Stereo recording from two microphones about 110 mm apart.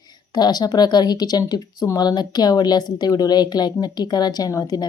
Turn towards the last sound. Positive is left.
turn(degrees=35)  # may be behind; listen again after turning